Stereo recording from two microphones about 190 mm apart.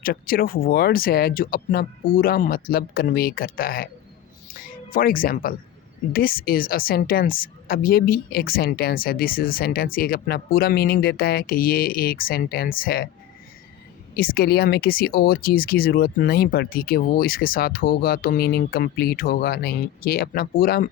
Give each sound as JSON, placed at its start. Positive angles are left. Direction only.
{"t": 0.0, "sound": "a woman's voice", "side_deg": 50}
{"t": 14.1, "sound": "a woman's voice", "side_deg": 50}